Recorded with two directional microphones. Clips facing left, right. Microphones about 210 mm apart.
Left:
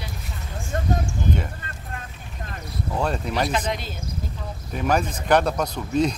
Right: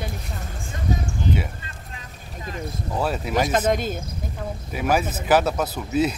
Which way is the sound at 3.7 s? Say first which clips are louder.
Right 7 dB; 50° right (ahead or behind).